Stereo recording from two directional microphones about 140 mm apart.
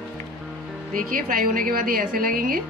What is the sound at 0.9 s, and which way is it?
A woman's voice, 80° right.